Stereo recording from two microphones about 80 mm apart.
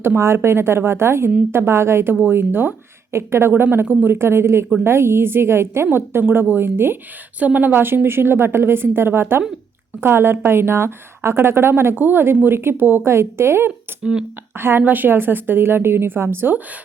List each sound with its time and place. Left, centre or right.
0.0 s a woman's voice: right
14.0 s speech: centre
14.5 s a woman's voice: right